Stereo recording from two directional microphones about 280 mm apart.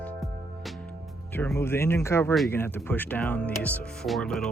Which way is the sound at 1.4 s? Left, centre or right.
Centre.